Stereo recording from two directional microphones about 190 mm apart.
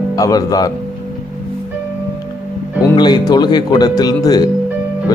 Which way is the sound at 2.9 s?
25° left (ahead or behind).